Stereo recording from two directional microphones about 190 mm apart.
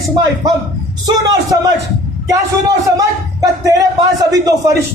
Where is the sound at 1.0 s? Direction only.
20° right (ahead or behind).